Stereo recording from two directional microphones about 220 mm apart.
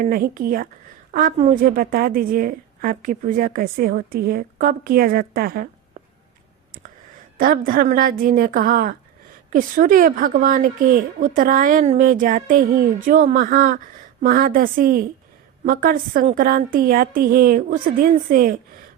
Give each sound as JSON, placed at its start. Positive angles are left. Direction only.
{"t": 0.0, "sound": "a woman's voice", "side_deg": -40}
{"t": 7.3, "sound": "a woman's voice", "side_deg": -40}